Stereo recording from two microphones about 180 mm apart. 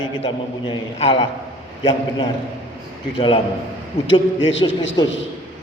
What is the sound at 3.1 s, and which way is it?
Speech, 30° left (ahead or behind).